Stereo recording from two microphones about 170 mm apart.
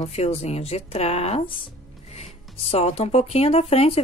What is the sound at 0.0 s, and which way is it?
Speech, 40° left (ahead or behind).